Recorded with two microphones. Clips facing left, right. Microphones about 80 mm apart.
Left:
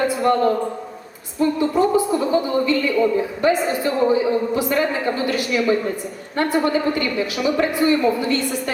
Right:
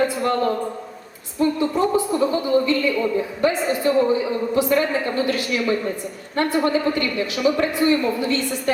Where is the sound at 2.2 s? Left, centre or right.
Centre.